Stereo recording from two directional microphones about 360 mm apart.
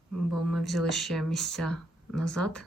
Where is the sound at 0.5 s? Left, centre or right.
Centre.